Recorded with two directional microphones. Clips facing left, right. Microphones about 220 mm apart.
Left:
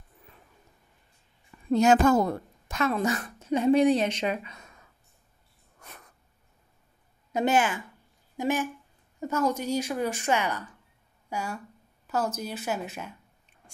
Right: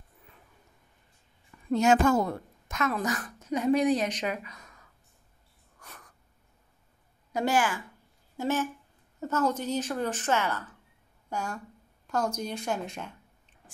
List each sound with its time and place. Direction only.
1.7 s a woman's voice: 40° left (ahead or behind)
5.8 s a sound: 25° left (ahead or behind)
7.3 s a woman's voice: 20° left (ahead or behind); by 13.6 s 5° left (ahead or behind)